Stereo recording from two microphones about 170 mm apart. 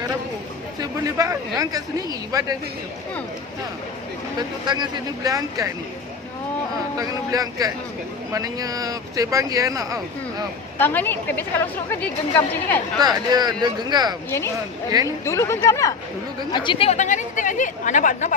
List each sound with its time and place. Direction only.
0.8 s speech: 20° right (ahead or behind)
4.4 s speech: 25° right (ahead or behind)
6.9 s speech: 20° right (ahead or behind)
10.8 s a woman's voice: 10° left (ahead or behind)
13.0 s speech: 25° right (ahead or behind)
14.3 s a woman's voice: 15° left (ahead or behind)
14.8 s speech: 20° right (ahead or behind)
15.2 s a woman's voice: 15° left (ahead or behind); by 18.3 s 50° left (ahead or behind)